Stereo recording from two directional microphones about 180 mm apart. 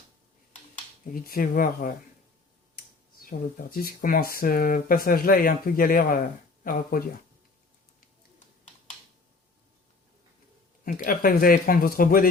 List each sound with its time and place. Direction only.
1.1 s speech: 55° left (ahead or behind)
10.8 s speech: 50° left (ahead or behind)